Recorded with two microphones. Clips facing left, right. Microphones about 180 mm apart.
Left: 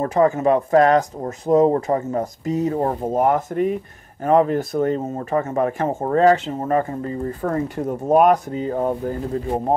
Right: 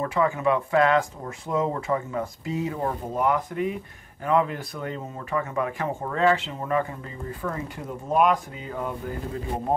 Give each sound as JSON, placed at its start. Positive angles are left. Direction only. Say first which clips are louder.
{"t": 0.0, "sound": "speech", "louder": "left 6 dB", "side_deg": 40}